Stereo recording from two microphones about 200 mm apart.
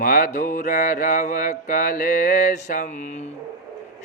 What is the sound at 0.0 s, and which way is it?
Mantra, 45° left (ahead or behind).